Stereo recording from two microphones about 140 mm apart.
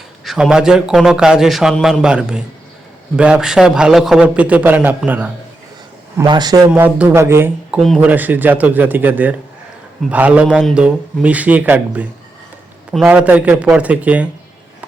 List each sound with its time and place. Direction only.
0.3 s a man's voice: 5° right (ahead or behind)
6.2 s a man's voice: 30° right (ahead or behind)
6.7 s a man's voice: 10° right (ahead or behind)